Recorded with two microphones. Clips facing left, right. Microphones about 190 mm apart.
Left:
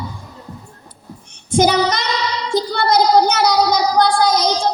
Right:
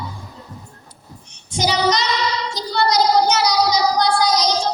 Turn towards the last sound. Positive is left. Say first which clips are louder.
# left 3 dB
turn(degrees=55)  # may be behind; listen again after turning